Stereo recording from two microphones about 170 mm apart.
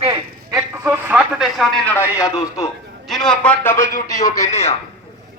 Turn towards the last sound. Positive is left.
turn(degrees=20)  # may be behind; listen again after turning